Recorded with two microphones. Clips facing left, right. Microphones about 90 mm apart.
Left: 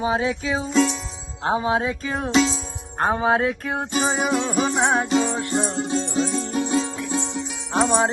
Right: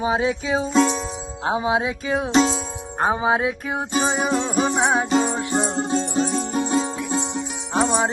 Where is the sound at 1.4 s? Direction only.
10° right (ahead or behind).